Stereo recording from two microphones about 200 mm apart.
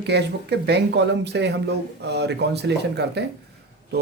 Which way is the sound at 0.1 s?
55° right (ahead or behind).